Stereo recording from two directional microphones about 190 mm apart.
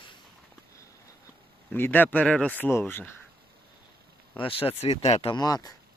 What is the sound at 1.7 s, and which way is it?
Speech, 10° left (ahead or behind).